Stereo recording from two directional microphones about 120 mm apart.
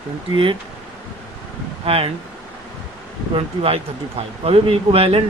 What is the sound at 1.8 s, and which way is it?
Speech, 50° right (ahead or behind).